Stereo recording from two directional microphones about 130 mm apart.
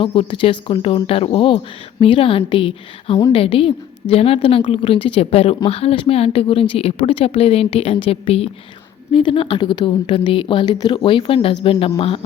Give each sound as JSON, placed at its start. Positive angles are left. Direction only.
{"t": 0.0, "sound": "speech", "side_deg": 40}